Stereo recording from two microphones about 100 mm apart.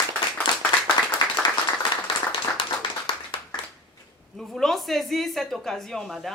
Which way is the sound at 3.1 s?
60° left (ahead or behind).